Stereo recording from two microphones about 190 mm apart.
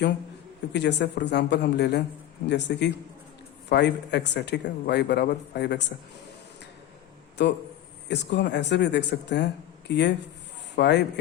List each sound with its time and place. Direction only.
0.7 s speech: 65° left (ahead or behind)
7.4 s speech: 65° left (ahead or behind)